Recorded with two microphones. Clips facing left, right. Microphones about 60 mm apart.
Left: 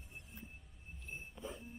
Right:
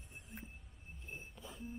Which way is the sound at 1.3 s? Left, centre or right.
Centre.